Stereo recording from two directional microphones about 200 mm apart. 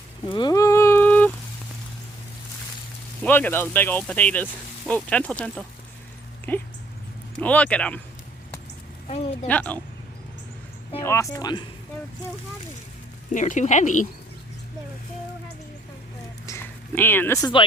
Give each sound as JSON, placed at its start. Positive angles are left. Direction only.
{"t": 0.3, "sound": "a sound", "side_deg": 20}
{"t": 3.2, "sound": "speech", "side_deg": 10}
{"t": 9.0, "sound": "speech", "side_deg": 30}
{"t": 9.5, "sound": "speech", "side_deg": 5}
{"t": 11.0, "sound": "speech", "side_deg": 15}
{"t": 13.3, "sound": "speech", "side_deg": 40}
{"t": 16.5, "sound": "a sound", "side_deg": 10}